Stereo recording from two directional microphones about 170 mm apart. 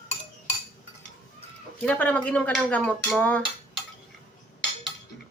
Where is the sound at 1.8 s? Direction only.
10° left (ahead or behind).